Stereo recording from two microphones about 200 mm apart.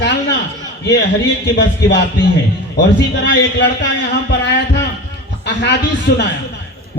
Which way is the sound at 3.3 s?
60° left (ahead or behind).